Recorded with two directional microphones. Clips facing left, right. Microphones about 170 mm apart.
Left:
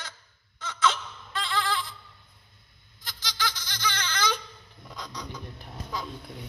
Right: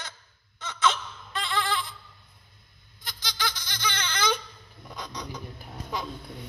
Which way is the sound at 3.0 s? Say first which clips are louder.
Even; 20° right (ahead or behind).